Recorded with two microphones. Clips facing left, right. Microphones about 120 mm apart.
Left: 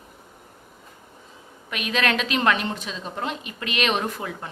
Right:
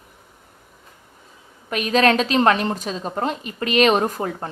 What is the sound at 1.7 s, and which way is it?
A woman's voice, 40° right (ahead or behind).